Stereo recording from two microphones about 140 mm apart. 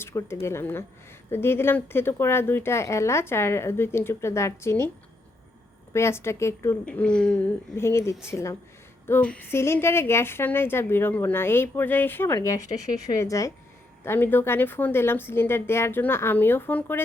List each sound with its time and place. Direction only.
0.0 s a woman's voice: 20° left (ahead or behind)
5.9 s a woman's voice: 20° left (ahead or behind)
6.8 s a woman's voice: 5° left (ahead or behind)
7.8 s a woman's voice: 20° left (ahead or behind)